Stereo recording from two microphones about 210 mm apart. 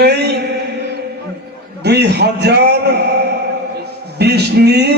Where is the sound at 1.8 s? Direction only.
55° right (ahead or behind).